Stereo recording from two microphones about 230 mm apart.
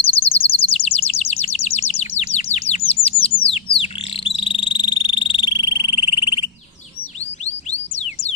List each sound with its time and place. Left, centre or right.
0.3 s bird: left
4.4 s frog: left